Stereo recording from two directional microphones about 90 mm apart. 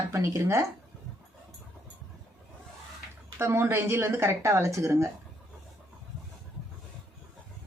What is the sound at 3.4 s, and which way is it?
Speech, 25° right (ahead or behind).